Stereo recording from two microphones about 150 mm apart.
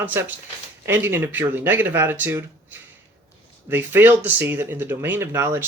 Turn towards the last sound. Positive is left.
turn(degrees=-15)  # may be behind; listen again after turning